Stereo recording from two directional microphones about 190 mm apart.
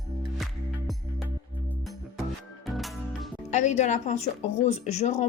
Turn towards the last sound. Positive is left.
turn(degrees=35)  # may be behind; listen again after turning